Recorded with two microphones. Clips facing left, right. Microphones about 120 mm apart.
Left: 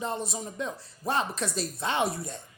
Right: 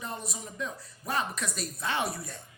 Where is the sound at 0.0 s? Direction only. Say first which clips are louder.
Left 6 dB; 25° left (ahead or behind).